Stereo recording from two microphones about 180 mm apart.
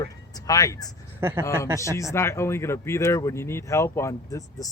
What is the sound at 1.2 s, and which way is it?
Speech, 15° right (ahead or behind).